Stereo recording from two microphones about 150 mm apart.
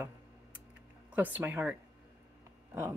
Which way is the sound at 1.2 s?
10° right (ahead or behind).